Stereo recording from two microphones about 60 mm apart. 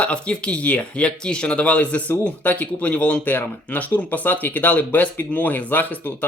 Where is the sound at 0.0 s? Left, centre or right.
Centre.